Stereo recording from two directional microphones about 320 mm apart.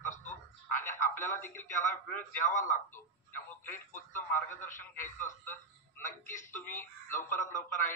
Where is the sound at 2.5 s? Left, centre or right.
Left.